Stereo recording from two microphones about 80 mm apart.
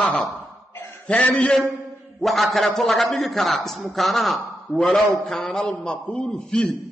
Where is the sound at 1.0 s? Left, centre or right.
Centre.